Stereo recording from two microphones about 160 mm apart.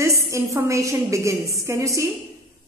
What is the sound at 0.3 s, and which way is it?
A woman's voice, 15° right (ahead or behind).